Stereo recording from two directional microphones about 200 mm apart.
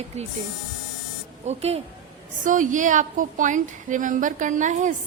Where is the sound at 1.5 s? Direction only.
30° right (ahead or behind).